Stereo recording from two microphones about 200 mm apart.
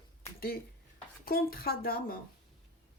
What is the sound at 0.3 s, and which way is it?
Speech, 50° left (ahead or behind).